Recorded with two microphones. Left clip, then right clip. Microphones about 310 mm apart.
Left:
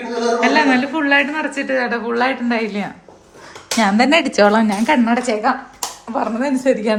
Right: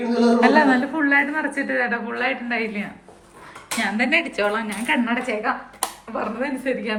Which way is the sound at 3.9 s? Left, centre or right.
Centre.